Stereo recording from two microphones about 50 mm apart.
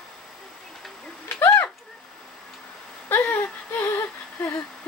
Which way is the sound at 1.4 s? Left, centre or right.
Left.